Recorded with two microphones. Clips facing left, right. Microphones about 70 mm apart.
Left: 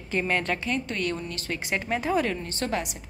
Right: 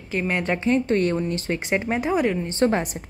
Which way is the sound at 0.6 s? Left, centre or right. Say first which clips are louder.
Right 9 dB; right.